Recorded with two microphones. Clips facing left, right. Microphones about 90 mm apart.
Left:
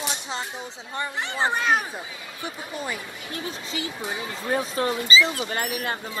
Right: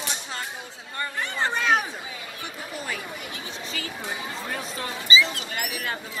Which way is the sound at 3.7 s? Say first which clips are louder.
Left 5 dB; 20° left (ahead or behind).